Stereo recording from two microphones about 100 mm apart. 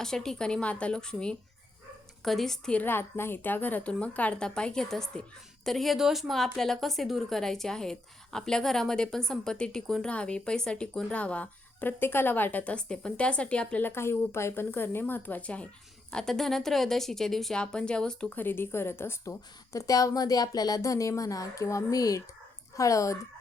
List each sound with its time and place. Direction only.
0.0 s a woman's voice: 5° left (ahead or behind)
2.8 s a woman's voice: 20° left (ahead or behind)